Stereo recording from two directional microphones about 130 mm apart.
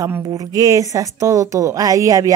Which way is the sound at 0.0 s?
25° right (ahead or behind).